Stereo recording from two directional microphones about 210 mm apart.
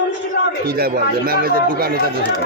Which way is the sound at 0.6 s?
45° right (ahead or behind).